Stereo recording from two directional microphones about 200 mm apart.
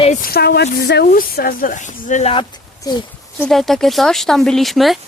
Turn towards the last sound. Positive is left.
turn(degrees=0)  # may be behind; listen again after turning